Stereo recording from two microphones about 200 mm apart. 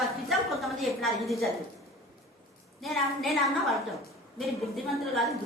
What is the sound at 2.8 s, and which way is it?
Speech, centre (ahead or behind).